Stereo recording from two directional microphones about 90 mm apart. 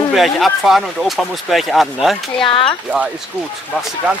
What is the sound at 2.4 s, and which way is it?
Speech, 70° left (ahead or behind).